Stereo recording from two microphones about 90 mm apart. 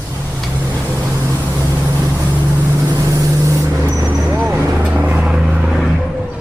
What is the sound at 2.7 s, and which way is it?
Vehicle, 35° right (ahead or behind).